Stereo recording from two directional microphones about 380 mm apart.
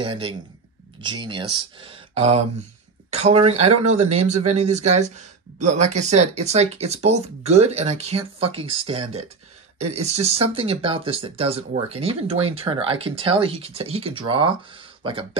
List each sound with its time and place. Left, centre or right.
0.0 s speech: centre